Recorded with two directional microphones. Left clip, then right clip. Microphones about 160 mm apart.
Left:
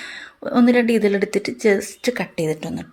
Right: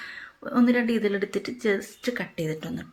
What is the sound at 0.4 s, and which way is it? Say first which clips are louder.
Speech: left 7 dB; 35° left (ahead or behind).